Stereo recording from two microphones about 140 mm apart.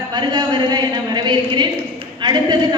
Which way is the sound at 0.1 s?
30° right (ahead or behind).